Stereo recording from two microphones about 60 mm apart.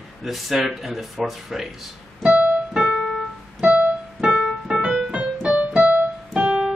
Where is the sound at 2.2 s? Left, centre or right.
Right.